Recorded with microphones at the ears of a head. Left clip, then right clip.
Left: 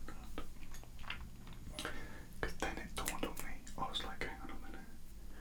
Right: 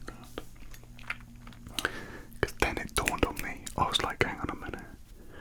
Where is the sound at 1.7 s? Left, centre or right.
Right.